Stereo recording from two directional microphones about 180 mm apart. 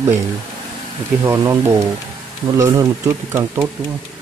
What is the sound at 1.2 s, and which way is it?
Speech, 15° right (ahead or behind).